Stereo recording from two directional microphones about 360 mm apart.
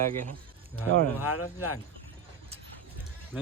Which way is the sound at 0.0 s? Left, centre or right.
Right.